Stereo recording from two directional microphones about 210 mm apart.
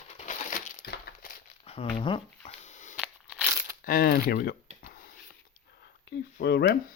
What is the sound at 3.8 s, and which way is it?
Coin, 45° left (ahead or behind).